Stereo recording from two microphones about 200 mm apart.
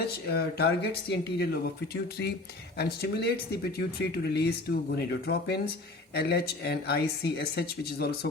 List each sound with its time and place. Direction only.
0.3 s speech: 50° left (ahead or behind)
2.7 s speech: 55° left (ahead or behind)